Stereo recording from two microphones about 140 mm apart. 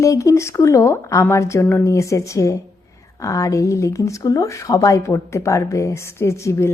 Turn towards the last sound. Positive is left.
turn(degrees=20)  # may be behind; listen again after turning